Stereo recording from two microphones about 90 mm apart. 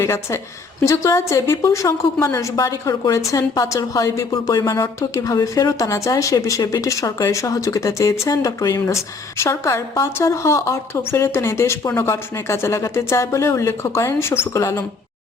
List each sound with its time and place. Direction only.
0.0 s a woman's voice: 30° left (ahead or behind)